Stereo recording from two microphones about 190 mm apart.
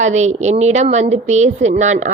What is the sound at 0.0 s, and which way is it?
A woman's voice, 35° right (ahead or behind).